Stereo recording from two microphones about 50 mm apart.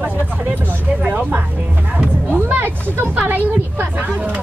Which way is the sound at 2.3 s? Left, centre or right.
Right.